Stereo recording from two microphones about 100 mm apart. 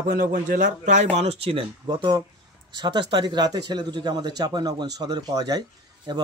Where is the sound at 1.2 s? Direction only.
80° right.